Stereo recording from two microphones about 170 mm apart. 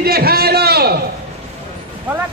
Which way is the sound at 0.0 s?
65° right (ahead or behind).